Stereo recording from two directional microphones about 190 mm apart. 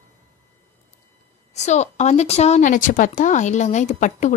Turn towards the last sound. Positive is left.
turn(degrees=40)  # may be behind; listen again after turning